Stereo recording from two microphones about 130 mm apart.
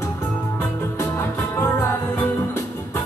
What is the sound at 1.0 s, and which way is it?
Music, 15° left (ahead or behind).